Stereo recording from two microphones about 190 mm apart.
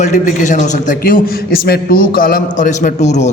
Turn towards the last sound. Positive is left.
turn(degrees=40)  # may be behind; listen again after turning